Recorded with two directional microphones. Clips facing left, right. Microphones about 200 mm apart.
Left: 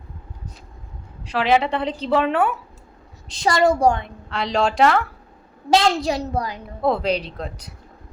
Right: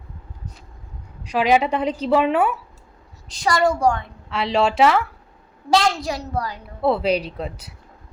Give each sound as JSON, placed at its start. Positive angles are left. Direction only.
{"t": 1.2, "sound": "a woman's voice", "side_deg": -15}
{"t": 3.2, "sound": "a woman's voice", "side_deg": 25}
{"t": 4.3, "sound": "speech", "side_deg": -5}
{"t": 5.7, "sound": "a woman's voice", "side_deg": 25}
{"t": 6.8, "sound": "a woman's voice", "side_deg": -5}